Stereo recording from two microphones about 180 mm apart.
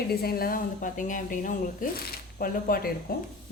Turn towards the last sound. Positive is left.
turn(degrees=55)  # may be behind; listen again after turning